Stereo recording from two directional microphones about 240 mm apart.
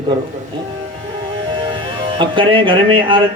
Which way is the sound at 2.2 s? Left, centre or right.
Right.